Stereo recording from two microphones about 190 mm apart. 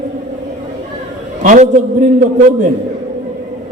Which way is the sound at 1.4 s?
40° right (ahead or behind).